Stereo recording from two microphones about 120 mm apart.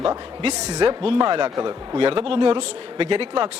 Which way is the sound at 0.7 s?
40° right (ahead or behind).